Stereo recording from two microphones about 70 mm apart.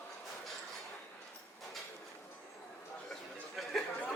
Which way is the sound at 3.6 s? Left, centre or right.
Centre.